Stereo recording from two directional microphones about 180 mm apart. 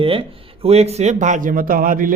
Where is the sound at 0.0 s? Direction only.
30° right (ahead or behind).